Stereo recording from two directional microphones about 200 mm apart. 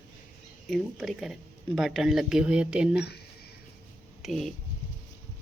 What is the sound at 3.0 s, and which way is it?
Speech, 55° left (ahead or behind).